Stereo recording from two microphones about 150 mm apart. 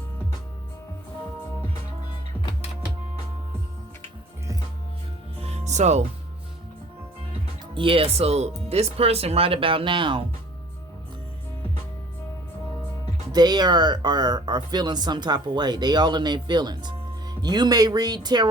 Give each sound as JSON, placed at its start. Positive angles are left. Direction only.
{"t": 5.4, "sound": "music", "side_deg": -50}
{"t": 7.7, "sound": "speech", "side_deg": -35}
{"t": 13.3, "sound": "speech", "side_deg": -25}